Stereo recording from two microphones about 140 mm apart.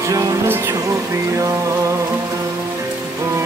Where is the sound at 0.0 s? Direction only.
25° right (ahead or behind).